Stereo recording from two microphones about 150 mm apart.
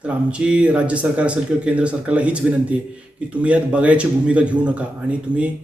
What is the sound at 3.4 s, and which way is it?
A man's voice, 10° right (ahead or behind).